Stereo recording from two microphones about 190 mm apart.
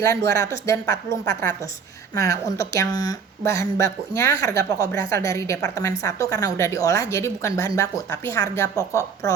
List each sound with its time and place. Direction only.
0.0 s speech: 15° left (ahead or behind)